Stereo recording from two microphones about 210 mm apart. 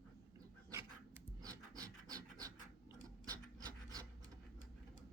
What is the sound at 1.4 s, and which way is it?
Pant, 15° right (ahead or behind).